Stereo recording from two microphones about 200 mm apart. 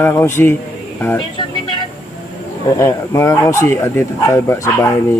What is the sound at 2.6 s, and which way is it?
Speech, 15° left (ahead or behind).